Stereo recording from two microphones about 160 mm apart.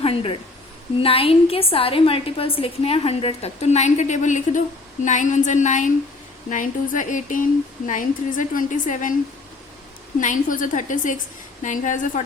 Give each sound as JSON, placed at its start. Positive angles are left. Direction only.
{"t": 0.0, "sound": "a sound", "side_deg": 35}
{"t": 1.0, "sound": "a woman's voice", "side_deg": 35}
{"t": 10.2, "sound": "a woman's voice", "side_deg": 55}